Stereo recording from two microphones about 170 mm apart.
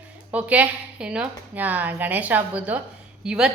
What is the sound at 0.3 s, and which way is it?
A woman's voice, 10° right (ahead or behind).